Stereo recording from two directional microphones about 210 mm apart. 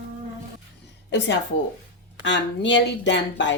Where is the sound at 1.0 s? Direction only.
55° left (ahead or behind).